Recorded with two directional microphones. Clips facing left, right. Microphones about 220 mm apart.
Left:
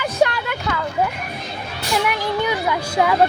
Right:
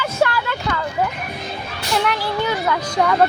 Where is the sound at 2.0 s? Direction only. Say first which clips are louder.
Left 1 dB; 15° left (ahead or behind).